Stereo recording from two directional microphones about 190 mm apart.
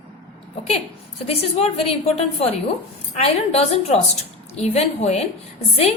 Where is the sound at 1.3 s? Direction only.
30° left (ahead or behind).